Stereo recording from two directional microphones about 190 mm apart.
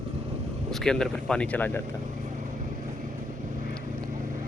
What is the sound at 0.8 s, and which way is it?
Speech, 5° left (ahead or behind).